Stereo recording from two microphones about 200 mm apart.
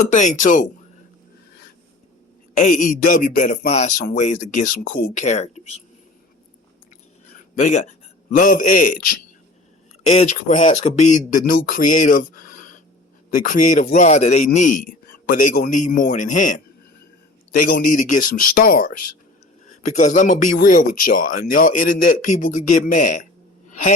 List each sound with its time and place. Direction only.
0.0 s speech: 40° left (ahead or behind)
2.6 s speech: 40° left (ahead or behind)
7.5 s a man's voice: 35° left (ahead or behind)
10.1 s speech: 35° left (ahead or behind)